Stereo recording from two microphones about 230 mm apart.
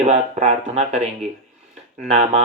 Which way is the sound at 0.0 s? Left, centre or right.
Right.